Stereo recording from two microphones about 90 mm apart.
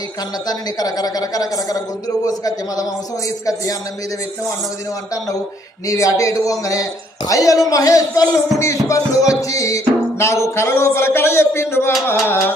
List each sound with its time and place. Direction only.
0.4 s a man's voice: 45° left (ahead or behind)
5.9 s music: 35° left (ahead or behind)